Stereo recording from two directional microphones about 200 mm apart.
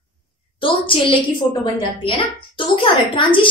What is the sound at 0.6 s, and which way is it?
A child's voice, 25° left (ahead or behind).